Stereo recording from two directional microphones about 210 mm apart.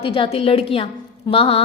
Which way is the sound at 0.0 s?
25° left (ahead or behind).